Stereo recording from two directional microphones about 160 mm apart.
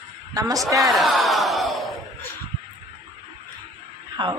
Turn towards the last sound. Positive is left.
turn(degrees=-25)  # may be behind; listen again after turning